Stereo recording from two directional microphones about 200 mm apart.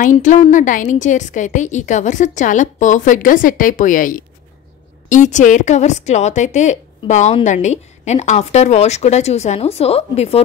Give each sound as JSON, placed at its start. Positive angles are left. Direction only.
{"t": 0.0, "sound": "a woman's voice", "side_deg": 40}